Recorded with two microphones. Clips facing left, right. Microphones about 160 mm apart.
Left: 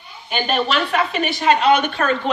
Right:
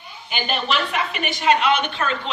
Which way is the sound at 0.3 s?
40° left (ahead or behind).